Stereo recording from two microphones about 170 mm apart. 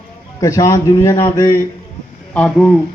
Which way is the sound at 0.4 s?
20° left (ahead or behind).